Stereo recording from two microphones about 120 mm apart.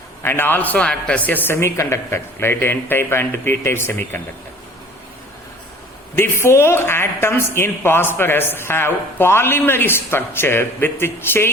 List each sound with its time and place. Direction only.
0.2 s a woman's voice: 20° left (ahead or behind)
6.1 s a woman's voice: 20° left (ahead or behind)